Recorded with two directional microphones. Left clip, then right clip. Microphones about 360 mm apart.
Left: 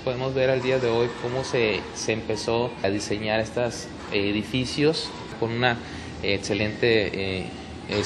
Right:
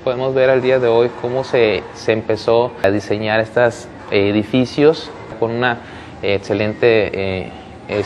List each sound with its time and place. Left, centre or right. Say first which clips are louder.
0.0 s speech: right 9 dB; centre